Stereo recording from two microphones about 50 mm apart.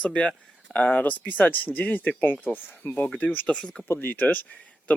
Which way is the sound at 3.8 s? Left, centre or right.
Left.